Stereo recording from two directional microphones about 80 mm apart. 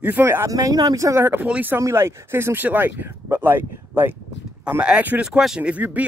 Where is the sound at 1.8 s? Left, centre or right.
Right; by 6.0 s centre.